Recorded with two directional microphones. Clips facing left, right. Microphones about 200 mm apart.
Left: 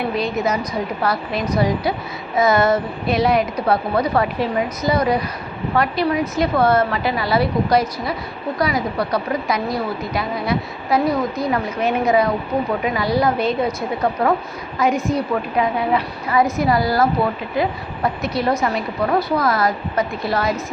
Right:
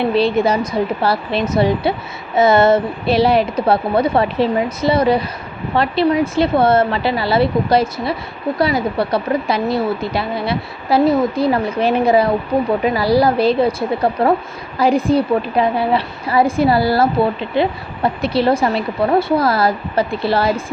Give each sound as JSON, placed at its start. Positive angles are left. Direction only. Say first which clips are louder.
{"t": 0.1, "sound": "a woman's voice", "louder": "right 6 dB", "side_deg": -30}